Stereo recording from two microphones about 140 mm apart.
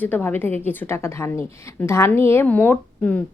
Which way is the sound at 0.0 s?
15° left (ahead or behind).